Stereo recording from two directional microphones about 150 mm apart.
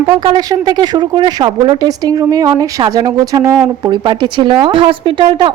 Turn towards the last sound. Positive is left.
turn(degrees=-35)  # may be behind; listen again after turning